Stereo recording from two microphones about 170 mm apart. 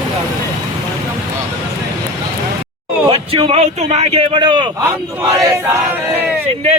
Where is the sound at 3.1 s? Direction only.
35° right (ahead or behind).